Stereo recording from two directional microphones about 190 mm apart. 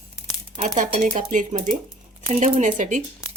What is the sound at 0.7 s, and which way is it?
Speech, 40° right (ahead or behind).